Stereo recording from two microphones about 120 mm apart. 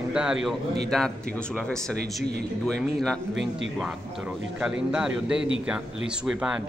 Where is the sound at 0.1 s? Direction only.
5° right (ahead or behind).